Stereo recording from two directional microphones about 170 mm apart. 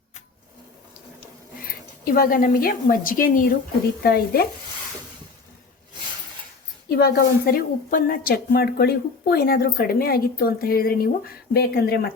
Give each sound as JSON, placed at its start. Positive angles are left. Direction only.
{"t": 1.6, "sound": "a woman's voice", "side_deg": 60}
{"t": 4.0, "sound": "stir", "side_deg": 65}
{"t": 6.9, "sound": "a woman's voice", "side_deg": 65}